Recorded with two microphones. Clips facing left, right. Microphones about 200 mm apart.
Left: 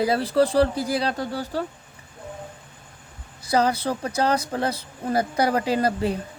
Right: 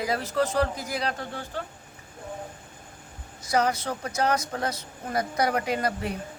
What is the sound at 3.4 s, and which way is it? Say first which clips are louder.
Speech: left 4 dB; 30° left (ahead or behind).